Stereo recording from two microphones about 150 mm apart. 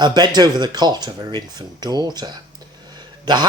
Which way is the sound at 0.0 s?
30° right (ahead or behind).